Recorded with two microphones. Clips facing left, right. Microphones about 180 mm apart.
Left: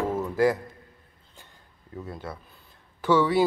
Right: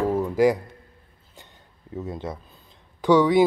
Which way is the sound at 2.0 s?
25° right (ahead or behind).